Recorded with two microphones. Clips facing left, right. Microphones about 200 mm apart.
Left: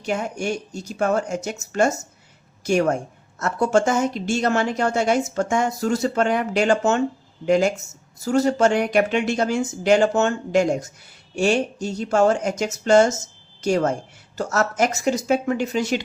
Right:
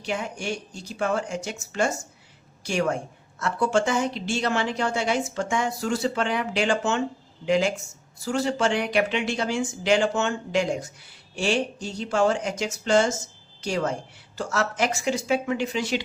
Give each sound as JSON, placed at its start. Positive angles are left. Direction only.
{"t": 0.0, "sound": "speech", "side_deg": 45}